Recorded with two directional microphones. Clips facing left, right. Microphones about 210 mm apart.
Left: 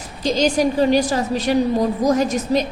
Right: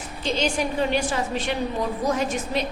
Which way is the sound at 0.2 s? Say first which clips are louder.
Left 7 dB; 40° left (ahead or behind).